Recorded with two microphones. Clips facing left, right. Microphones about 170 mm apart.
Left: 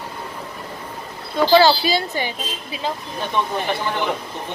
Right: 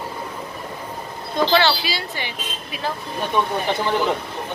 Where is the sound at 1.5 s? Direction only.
40° left (ahead or behind).